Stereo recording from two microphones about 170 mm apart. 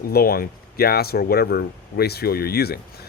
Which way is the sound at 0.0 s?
60° left (ahead or behind).